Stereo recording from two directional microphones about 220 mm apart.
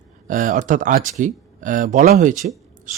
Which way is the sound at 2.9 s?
35° right (ahead or behind).